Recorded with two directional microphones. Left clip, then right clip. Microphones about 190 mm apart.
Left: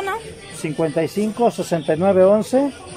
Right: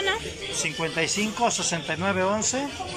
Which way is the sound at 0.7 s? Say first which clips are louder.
Left 7 dB; 45° left (ahead or behind).